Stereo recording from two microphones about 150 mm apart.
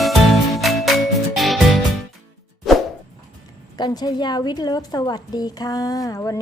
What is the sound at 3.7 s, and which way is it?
A woman's voice, 30° left (ahead or behind).